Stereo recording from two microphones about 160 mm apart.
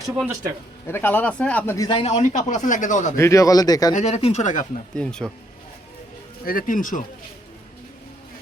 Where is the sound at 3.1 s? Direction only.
20° left (ahead or behind).